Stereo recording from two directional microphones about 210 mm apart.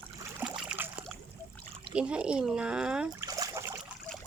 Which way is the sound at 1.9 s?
5° right (ahead or behind).